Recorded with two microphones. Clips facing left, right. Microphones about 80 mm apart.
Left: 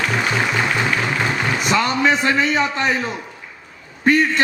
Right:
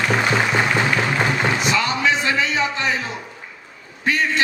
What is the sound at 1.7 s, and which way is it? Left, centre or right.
A man's voice, left.